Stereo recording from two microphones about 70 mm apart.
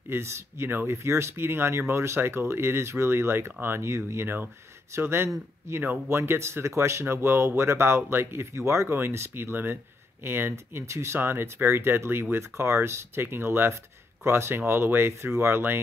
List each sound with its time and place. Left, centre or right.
0.1 s speech: right